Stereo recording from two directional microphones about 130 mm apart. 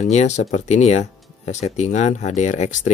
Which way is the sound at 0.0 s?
60° left (ahead or behind).